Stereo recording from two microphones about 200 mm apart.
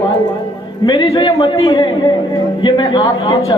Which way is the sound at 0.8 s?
20° left (ahead or behind).